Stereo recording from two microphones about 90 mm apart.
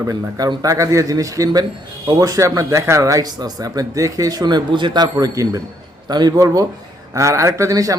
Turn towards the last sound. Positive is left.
turn(degrees=-40)  # may be behind; listen again after turning